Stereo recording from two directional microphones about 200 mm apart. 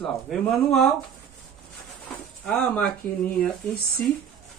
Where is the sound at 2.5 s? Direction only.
5° left (ahead or behind).